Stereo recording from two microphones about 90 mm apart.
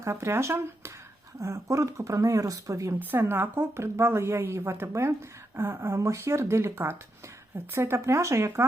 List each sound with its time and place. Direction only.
0.0 s a woman's voice: 30° right (ahead or behind)
3.0 s a woman's voice: 20° right (ahead or behind)